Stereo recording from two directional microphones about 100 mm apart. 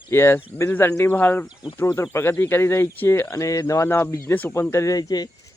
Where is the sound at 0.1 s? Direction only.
25° left (ahead or behind); by 5.3 s 40° left (ahead or behind).